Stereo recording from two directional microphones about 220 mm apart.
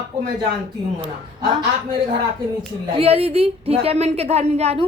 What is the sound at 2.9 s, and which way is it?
A woman's voice, 25° right (ahead or behind).